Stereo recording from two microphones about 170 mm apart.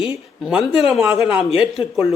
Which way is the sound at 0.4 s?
5° right (ahead or behind).